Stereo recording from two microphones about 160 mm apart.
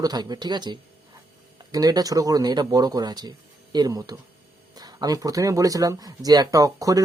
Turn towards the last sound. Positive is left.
turn(degrees=-20)  # may be behind; listen again after turning